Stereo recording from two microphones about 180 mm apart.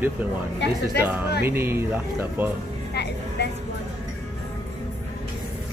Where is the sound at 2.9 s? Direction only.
70° left (ahead or behind).